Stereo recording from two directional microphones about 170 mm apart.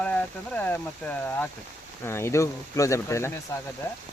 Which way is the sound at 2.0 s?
15° left (ahead or behind).